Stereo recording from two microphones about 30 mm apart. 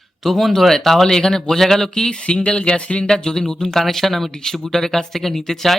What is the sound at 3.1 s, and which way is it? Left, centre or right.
Speech, left.